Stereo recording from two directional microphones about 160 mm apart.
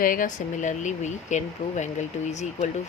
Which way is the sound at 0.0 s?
60° left (ahead or behind).